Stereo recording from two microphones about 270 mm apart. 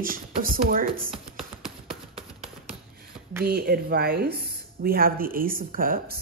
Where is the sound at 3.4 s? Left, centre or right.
Right.